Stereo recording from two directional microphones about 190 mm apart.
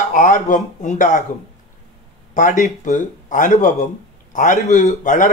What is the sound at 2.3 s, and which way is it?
Speech, 40° left (ahead or behind).